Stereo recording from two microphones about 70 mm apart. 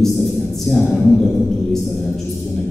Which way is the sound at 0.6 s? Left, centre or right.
Centre.